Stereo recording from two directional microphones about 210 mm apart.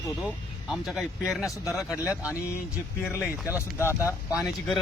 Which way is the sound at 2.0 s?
15° left (ahead or behind).